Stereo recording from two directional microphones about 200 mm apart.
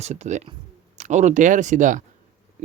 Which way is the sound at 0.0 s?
35° right (ahead or behind).